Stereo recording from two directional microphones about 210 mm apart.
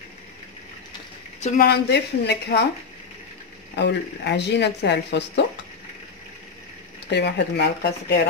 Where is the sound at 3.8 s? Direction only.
55° left (ahead or behind).